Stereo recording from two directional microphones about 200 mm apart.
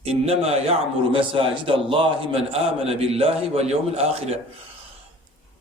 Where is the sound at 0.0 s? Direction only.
30° right (ahead or behind).